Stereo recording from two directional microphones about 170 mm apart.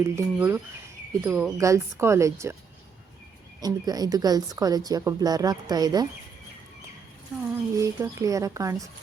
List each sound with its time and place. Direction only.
0.0 s a woman's voice: 15° right (ahead or behind)
3.6 s a woman's voice: 20° right (ahead or behind)
7.8 s a woman's voice: 20° right (ahead or behind)